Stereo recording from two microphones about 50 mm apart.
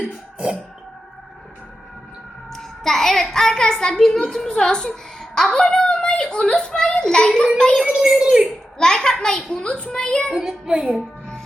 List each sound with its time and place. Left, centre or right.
0.0 s throat clearing: right
2.5 s a child's voice: centre
7.9 s speech: centre
8.8 s a child's voice: centre
10.3 s speech: centre